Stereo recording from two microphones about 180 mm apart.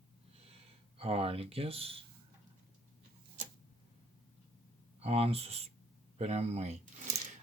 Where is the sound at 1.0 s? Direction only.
35° right (ahead or behind).